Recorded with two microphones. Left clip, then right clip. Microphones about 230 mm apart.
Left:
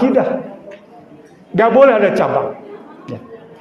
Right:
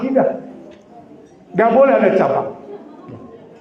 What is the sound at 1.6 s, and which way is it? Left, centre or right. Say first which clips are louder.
Speech: left 2 dB; left.